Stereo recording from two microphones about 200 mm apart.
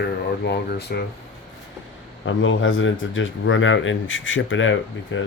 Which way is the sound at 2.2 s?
75° left (ahead or behind).